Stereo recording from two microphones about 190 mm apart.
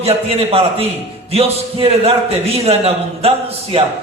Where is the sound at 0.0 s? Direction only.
30° right (ahead or behind).